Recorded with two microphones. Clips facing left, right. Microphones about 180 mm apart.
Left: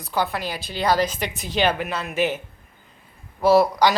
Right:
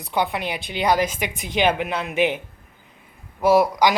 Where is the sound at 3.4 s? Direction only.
15° right (ahead or behind).